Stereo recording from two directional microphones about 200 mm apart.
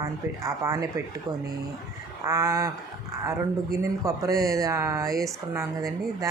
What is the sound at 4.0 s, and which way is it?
Speech, 15° right (ahead or behind).